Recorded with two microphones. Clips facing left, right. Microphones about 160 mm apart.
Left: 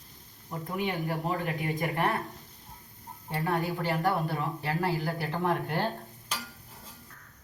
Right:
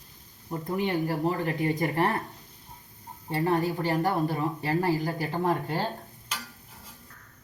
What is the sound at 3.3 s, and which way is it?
Speech, 30° right (ahead or behind).